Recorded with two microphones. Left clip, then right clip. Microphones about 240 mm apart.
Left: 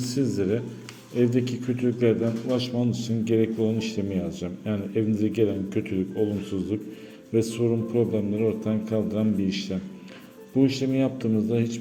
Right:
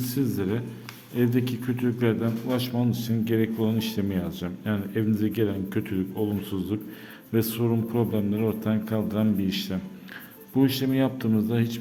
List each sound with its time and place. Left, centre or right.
0.0 s a man's voice: centre